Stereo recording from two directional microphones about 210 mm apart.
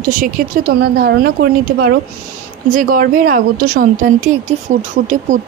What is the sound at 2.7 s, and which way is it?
Speech, 40° right (ahead or behind).